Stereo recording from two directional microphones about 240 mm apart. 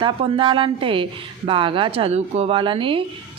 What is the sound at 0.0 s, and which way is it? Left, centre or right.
A woman's voice, right.